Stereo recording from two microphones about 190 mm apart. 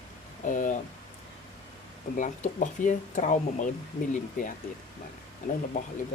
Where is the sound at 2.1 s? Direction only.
45° left (ahead or behind).